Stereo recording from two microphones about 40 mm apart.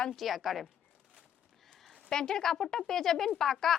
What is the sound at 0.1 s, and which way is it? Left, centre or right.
Speech, centre.